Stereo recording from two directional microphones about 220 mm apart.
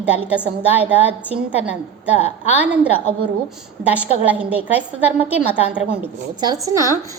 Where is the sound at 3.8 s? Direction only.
5° right (ahead or behind).